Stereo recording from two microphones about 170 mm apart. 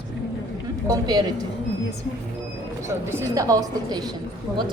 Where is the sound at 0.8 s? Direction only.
25° right (ahead or behind).